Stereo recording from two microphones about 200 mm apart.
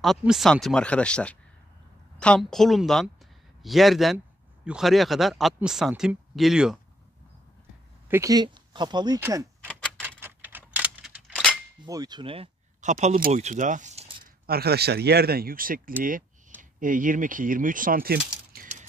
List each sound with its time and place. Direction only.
0.0 s speech: centre (ahead or behind)
8.1 s speech: 15° right (ahead or behind)
9.7 s typewriter: 5° left (ahead or behind)
10.0 s typewriter: 10° right (ahead or behind)
11.8 s speech: 20° right (ahead or behind)
12.9 s speech: 45° right (ahead or behind)
14.5 s speech: 55° right (ahead or behind)
16.0 s a sound: 45° right (ahead or behind)
16.8 s speech: 40° right (ahead or behind)
18.5 s a sound: 40° right (ahead or behind)